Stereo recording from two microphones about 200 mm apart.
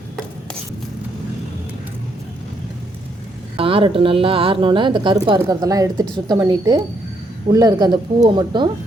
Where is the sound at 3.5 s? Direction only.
25° right (ahead or behind).